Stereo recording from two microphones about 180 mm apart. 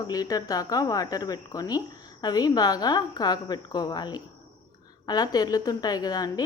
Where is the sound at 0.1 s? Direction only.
20° left (ahead or behind).